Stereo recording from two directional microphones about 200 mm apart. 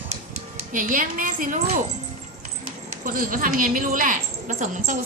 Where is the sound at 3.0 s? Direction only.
45° right (ahead or behind).